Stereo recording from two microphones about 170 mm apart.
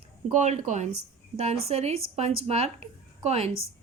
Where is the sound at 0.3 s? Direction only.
45° right (ahead or behind).